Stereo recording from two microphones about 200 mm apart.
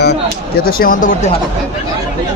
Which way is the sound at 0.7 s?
45° left (ahead or behind).